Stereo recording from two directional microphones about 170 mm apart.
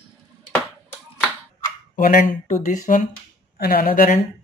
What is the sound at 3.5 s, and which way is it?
Speech, 65° left (ahead or behind).